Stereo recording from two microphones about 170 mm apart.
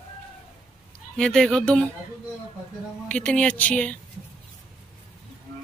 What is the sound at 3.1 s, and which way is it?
Speech, 5° left (ahead or behind).